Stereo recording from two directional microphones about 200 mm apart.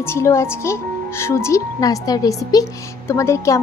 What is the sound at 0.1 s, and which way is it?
A woman's voice, 15° left (ahead or behind).